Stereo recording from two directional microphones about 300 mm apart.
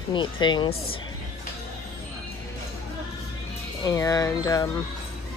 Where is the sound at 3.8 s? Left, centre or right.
Centre.